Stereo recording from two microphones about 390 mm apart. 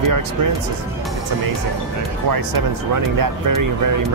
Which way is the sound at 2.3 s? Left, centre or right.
Right.